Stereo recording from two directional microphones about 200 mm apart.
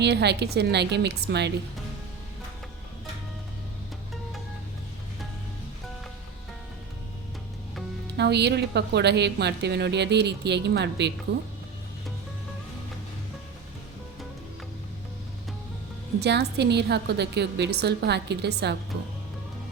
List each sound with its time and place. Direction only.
0.0 s a woman's voice: 55° right (ahead or behind)
8.1 s a woman's voice: 55° right (ahead or behind)
16.2 s a woman's voice: 55° right (ahead or behind)